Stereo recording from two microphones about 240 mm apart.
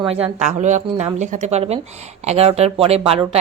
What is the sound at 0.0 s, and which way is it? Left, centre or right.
A woman's voice, right.